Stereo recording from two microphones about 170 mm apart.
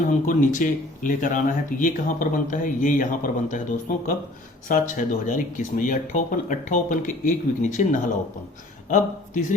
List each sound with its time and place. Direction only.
0.3 s speech: 50° left (ahead or behind)
8.9 s speech: 50° left (ahead or behind)